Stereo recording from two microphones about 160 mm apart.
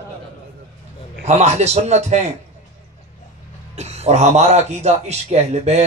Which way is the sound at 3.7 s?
45° right (ahead or behind).